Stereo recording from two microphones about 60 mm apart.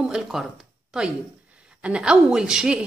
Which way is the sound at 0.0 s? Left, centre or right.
Centre.